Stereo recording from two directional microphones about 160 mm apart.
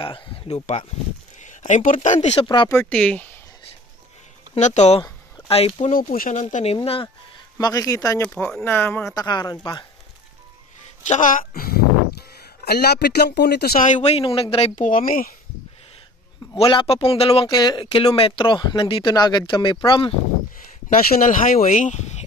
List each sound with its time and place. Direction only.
0.0 s speech: 35° left (ahead or behind)
2.4 s speech: 30° left (ahead or behind)
2.7 s speech: 10° left (ahead or behind)
4.6 s speech: 45° left (ahead or behind)
5.9 s speech: 60° left (ahead or behind)
6.4 s speech: 40° left (ahead or behind)
7.5 s speech: 20° left (ahead or behind)
8.2 s speech: 10° left (ahead or behind)
11.1 s speech: 55° left (ahead or behind); by 11.8 s 70° left (ahead or behind)
12.6 s speech: 85° left
13.8 s speech: 45° left (ahead or behind)
14.8 s speech: 55° left (ahead or behind)
16.5 s speech: 35° left (ahead or behind)
20.9 s speech: 65° left (ahead or behind); by 22.2 s 50° left (ahead or behind)